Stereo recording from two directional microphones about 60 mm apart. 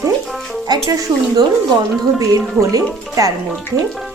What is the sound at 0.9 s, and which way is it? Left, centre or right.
A woman's voice, right.